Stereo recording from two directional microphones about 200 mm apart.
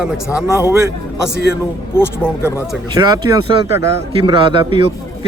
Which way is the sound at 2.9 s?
20° right (ahead or behind).